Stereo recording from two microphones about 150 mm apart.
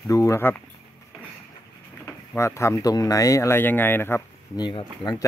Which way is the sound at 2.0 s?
15° left (ahead or behind).